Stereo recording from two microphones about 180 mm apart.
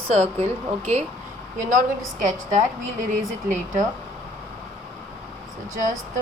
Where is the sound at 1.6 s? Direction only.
50° right (ahead or behind).